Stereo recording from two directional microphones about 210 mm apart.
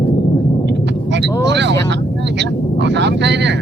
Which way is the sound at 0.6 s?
55° right (ahead or behind).